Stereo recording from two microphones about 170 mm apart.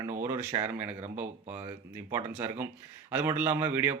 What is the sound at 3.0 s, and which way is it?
Speech, 10° right (ahead or behind).